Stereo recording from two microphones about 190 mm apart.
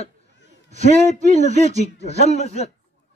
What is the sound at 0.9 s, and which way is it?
A man's voice, 35° left (ahead or behind).